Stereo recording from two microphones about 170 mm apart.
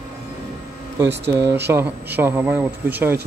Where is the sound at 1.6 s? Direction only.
15° right (ahead or behind).